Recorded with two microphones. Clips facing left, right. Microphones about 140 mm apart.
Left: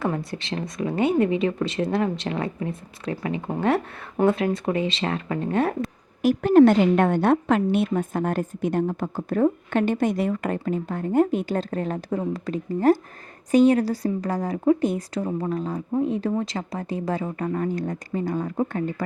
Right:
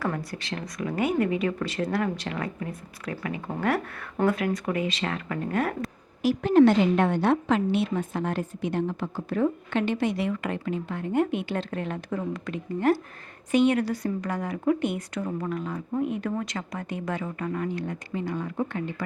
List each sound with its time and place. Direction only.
0.0 s a woman's voice: 25° left (ahead or behind)
6.2 s a woman's voice: 50° left (ahead or behind)